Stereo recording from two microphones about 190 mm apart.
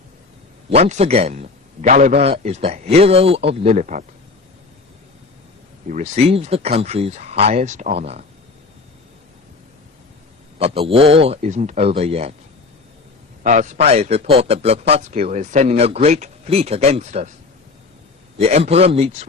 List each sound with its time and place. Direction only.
0.7 s a man's voice: 35° right (ahead or behind)
5.9 s a man's voice: 40° right (ahead or behind)
10.6 s a man's voice: 30° right (ahead or behind)
13.4 s a man's voice: 40° right (ahead or behind)
18.3 s a man's voice: 35° right (ahead or behind)